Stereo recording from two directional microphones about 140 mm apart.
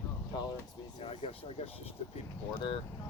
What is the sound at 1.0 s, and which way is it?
Speech, 45° left (ahead or behind).